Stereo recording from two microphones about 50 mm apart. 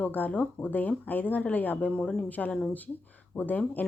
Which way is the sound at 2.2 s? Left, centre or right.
Left.